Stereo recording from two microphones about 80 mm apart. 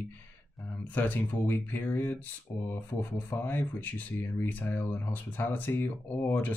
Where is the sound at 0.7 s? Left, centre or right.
Left.